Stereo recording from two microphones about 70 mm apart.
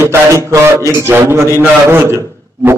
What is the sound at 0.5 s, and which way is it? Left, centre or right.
A man's voice, right.